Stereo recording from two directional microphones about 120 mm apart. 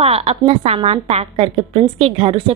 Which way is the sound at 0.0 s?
60° right (ahead or behind).